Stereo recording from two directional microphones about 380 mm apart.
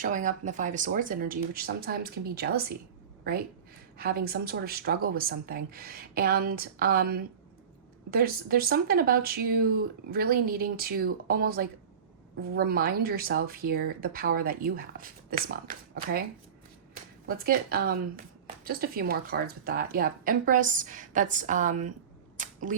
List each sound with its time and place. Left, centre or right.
0.0 s speech: centre
3.9 s speech: right
17.2 s speech: right
22.4 s a sound: centre